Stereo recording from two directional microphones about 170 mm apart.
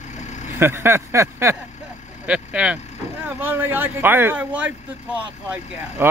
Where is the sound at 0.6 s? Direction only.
15° right (ahead or behind).